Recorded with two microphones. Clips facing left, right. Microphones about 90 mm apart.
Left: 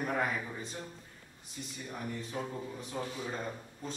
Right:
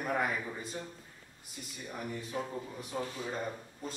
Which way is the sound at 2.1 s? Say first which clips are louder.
Right 2 dB; 5° right (ahead or behind).